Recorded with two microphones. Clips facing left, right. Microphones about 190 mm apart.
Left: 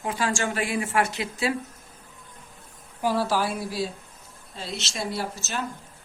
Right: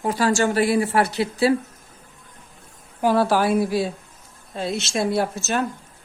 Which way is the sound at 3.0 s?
60° right (ahead or behind).